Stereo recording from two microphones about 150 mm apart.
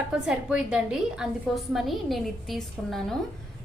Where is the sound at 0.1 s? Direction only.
5° right (ahead or behind).